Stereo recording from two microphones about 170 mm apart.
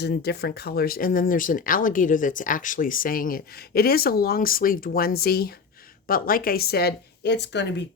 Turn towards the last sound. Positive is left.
turn(degrees=90)